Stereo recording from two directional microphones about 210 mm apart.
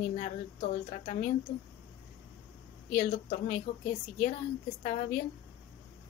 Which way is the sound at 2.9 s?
40° left (ahead or behind).